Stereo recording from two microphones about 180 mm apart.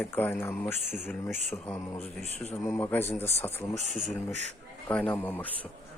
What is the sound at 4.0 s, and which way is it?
Speech, 40° right (ahead or behind).